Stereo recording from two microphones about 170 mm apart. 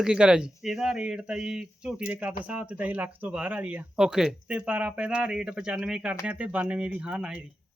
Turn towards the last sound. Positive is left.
turn(degrees=-5)  # may be behind; listen again after turning